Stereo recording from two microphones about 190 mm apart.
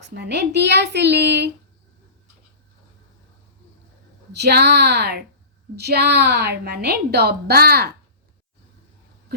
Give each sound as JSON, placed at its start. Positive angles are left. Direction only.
{"t": 0.0, "sound": "a woman's voice", "side_deg": -60}
{"t": 4.3, "sound": "a woman's voice", "side_deg": -60}